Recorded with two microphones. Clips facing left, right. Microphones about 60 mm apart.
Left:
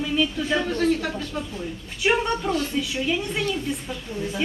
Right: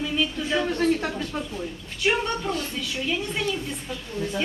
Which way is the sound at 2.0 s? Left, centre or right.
Centre.